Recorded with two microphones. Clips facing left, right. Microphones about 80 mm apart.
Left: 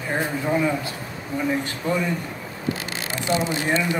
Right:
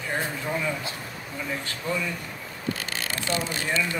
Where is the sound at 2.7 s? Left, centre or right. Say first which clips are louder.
Left 3 dB; centre.